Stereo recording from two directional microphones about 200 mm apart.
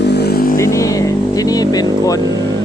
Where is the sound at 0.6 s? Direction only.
15° left (ahead or behind).